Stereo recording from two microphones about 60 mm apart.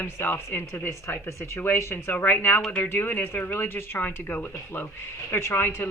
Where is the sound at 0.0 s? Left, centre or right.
Left.